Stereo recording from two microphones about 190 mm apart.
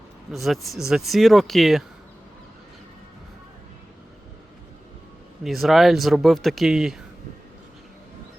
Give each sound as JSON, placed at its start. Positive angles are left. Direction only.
{"t": 0.3, "sound": "speech", "side_deg": 0}
{"t": 5.4, "sound": "speech", "side_deg": 0}